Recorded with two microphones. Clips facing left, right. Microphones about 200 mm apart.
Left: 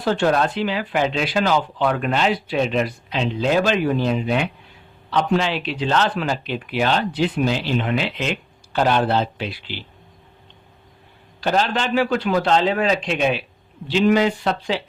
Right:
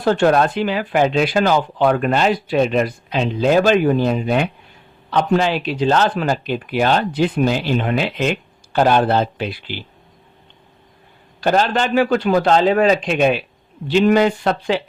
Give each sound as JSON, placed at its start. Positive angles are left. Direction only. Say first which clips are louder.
{"t": 0.0, "sound": "speech", "louder": "right 4 dB", "side_deg": -50}
{"t": 11.3, "sound": "speech", "louder": "right 4 dB", "side_deg": -50}